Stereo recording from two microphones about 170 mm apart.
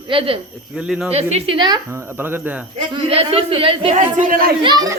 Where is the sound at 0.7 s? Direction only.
5° right (ahead or behind).